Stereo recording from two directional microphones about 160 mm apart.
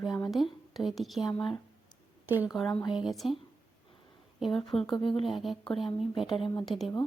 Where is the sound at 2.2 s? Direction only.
10° right (ahead or behind).